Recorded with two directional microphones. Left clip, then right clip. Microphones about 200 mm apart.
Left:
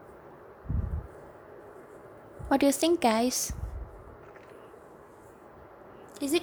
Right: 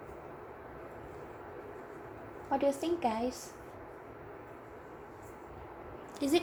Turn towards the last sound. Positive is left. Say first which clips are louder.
# left 1 dB
turn(degrees=20)  # may be behind; listen again after turning